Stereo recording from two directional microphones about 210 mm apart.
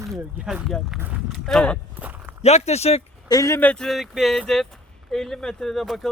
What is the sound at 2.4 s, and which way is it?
Speech, 30° left (ahead or behind).